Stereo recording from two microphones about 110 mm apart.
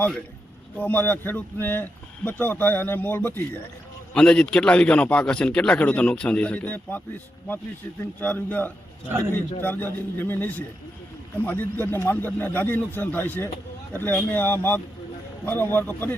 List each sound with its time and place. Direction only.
0.8 s a man's voice: 15° left (ahead or behind)
8.2 s a man's voice: 15° left (ahead or behind)